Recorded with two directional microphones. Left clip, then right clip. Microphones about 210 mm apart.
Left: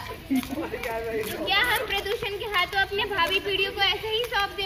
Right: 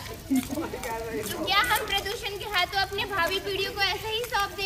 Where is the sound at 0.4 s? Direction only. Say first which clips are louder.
Left 1 dB; 55° right (ahead or behind).